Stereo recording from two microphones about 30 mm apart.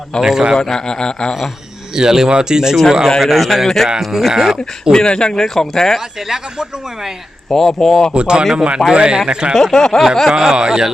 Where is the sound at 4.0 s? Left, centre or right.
Centre.